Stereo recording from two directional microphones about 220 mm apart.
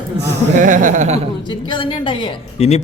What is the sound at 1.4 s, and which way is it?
A man's voice, 20° left (ahead or behind).